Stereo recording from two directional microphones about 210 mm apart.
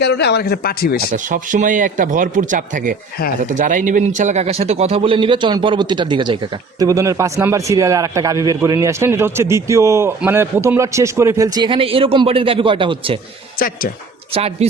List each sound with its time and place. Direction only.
0.0 s speech: 55° left (ahead or behind)
1.1 s a man's voice: 40° right (ahead or behind)
14.3 s a man's voice: 30° right (ahead or behind)